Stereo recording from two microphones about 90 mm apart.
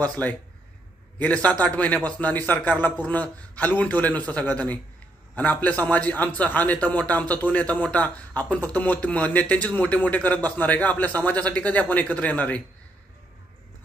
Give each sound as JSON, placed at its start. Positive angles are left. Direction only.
{"t": 0.0, "sound": "a man's voice", "side_deg": 15}